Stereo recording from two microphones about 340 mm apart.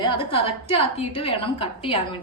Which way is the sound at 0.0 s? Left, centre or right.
Centre.